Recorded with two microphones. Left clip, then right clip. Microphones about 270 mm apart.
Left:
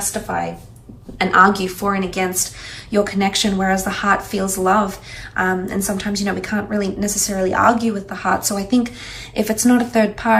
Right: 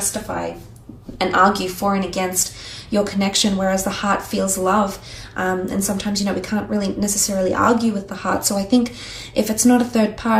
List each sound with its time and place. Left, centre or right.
0.0 s a woman's voice: centre